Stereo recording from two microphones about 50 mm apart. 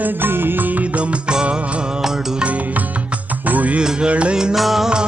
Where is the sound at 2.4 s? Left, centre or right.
Right.